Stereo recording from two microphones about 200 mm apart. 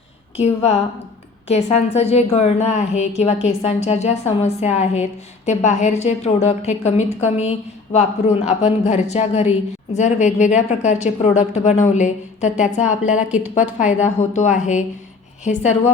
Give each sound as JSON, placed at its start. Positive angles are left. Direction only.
{"t": 0.3, "sound": "a woman's voice", "side_deg": 30}
{"t": 13.1, "sound": "a woman's voice", "side_deg": -5}
{"t": 14.0, "sound": "a woman's voice", "side_deg": 35}